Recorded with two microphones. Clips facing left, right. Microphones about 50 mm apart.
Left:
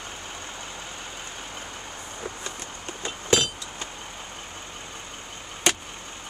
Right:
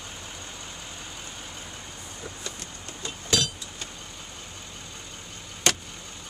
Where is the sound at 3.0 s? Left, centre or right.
Left.